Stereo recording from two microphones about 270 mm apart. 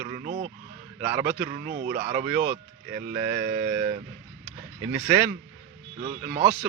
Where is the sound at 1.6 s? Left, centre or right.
Right.